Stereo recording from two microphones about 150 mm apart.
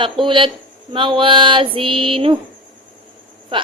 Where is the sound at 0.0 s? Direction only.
35° right (ahead or behind).